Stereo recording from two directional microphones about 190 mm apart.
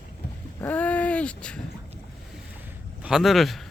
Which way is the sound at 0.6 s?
10° left (ahead or behind).